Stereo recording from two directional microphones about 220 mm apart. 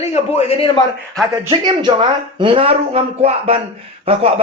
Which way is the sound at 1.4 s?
20° right (ahead or behind).